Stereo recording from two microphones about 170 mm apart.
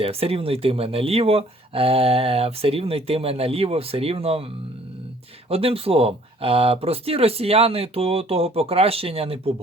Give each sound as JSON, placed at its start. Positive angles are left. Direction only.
{"t": 0.0, "sound": "speech", "side_deg": -35}
{"t": 5.5, "sound": "speech", "side_deg": -35}